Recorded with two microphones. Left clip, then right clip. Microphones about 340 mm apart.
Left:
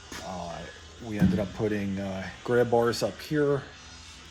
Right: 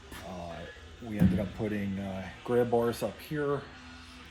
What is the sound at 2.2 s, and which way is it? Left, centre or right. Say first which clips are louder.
Speech: left 3 dB; left.